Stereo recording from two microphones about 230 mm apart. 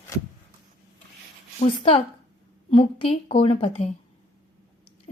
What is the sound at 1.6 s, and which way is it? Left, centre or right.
A woman's voice, left.